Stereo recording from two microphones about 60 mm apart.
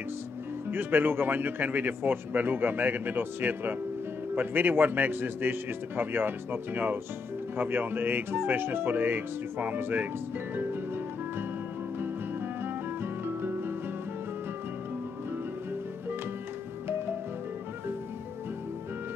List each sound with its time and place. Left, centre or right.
0.7 s speech: right
12.0 s music: right